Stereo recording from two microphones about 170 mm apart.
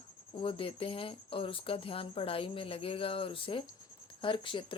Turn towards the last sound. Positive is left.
turn(degrees=30)  # may be behind; listen again after turning